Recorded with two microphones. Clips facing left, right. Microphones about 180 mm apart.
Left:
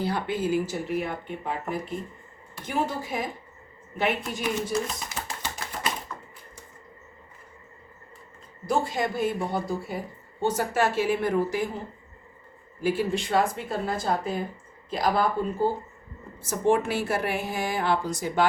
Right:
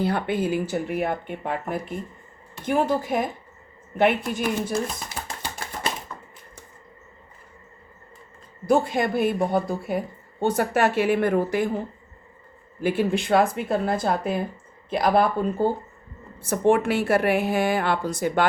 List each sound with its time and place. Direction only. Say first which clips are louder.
0.0 s a woman's voice: right 4 dB; 60° right (ahead or behind)
6.1 s typewriter: even; 30° right (ahead or behind)
8.6 s a woman's voice: right 5 dB; 60° right (ahead or behind)
12.8 s a woman's voice: right 3 dB; 60° right (ahead or behind)